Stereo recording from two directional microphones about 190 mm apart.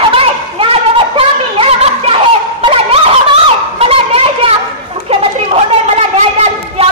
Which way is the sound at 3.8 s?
30° right (ahead or behind).